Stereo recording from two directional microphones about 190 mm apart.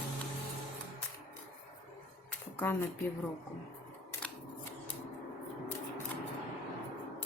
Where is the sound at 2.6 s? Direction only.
10° left (ahead or behind).